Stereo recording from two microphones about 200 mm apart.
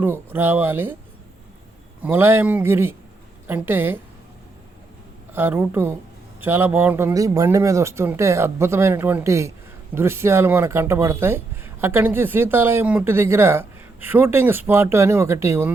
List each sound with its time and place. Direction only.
0.0 s speech: 10° right (ahead or behind)
2.0 s speech: 10° right (ahead or behind)
5.3 s speech: 10° right (ahead or behind)